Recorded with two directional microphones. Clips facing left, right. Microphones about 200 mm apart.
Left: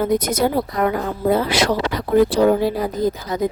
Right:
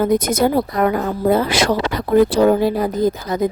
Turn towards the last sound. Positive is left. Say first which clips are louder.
# right 3 dB
turn(degrees=-50)  # may be behind; listen again after turning